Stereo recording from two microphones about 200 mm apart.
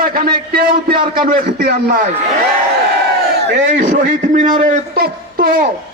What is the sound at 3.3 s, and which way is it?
Speech, 60° right (ahead or behind).